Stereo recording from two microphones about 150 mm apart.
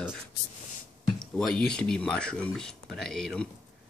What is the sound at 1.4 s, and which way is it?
Speech, 5° left (ahead or behind).